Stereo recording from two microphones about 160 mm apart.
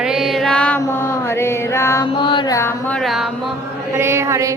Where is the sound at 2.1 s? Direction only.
30° left (ahead or behind); by 3.5 s centre (ahead or behind).